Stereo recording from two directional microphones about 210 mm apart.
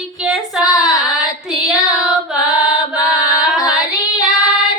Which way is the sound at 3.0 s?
15° left (ahead or behind).